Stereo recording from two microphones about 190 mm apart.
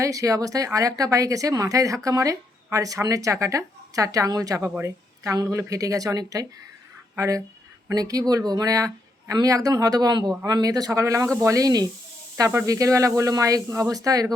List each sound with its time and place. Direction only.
0.0 s speech: 15° right (ahead or behind)